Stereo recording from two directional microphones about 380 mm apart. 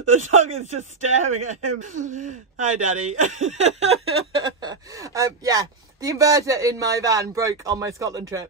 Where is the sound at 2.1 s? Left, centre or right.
Centre.